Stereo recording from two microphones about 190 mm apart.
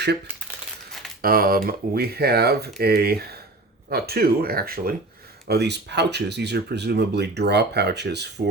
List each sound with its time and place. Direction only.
1.2 s speech: 50° right (ahead or behind)